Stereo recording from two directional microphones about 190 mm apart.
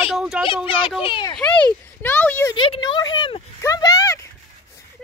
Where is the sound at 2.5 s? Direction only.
25° left (ahead or behind).